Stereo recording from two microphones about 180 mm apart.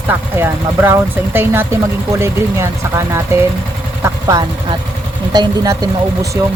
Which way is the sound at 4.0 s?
20° right (ahead or behind).